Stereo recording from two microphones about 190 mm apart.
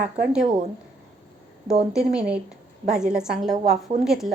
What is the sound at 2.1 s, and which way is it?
A woman's voice, 5° right (ahead or behind).